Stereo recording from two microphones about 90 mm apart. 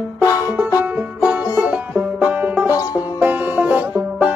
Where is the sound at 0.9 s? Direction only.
20° right (ahead or behind).